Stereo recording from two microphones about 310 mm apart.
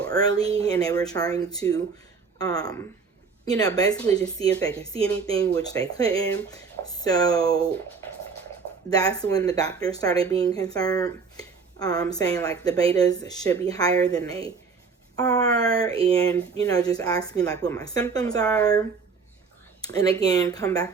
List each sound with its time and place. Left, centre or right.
0.0 s speech: centre
0.4 s speech: centre
0.7 s speech: centre
8.9 s speech: centre
19.8 s speech: centre